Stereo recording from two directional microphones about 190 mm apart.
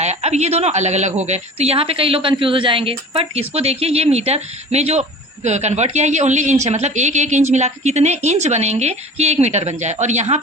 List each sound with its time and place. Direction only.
0.0 s a woman's voice: 35° right (ahead or behind)